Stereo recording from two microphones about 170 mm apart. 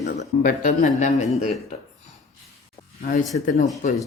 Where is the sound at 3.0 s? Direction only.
50° left (ahead or behind).